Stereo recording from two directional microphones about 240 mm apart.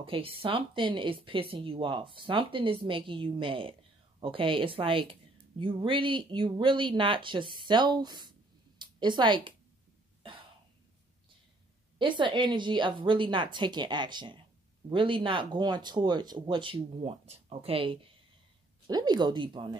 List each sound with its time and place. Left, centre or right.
0.0 s speech: right
12.0 s speech: centre